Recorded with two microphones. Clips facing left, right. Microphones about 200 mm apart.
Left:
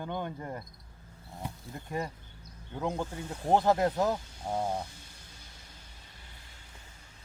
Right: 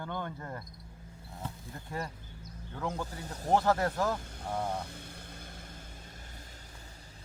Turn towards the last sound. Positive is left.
turn(degrees=-35)  # may be behind; listen again after turning